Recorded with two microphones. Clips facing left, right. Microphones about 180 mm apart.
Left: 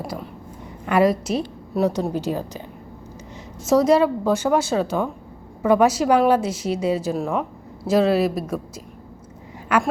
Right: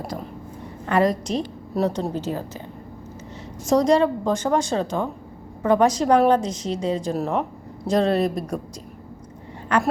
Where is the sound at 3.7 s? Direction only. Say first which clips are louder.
Left 1 dB; 5° left (ahead or behind).